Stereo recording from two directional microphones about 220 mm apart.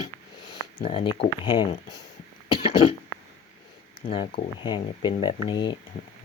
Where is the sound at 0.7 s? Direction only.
25° left (ahead or behind).